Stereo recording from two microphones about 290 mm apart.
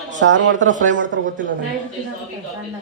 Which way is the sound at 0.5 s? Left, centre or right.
Right.